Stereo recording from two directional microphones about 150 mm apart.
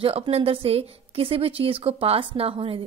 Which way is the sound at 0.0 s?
40° right (ahead or behind).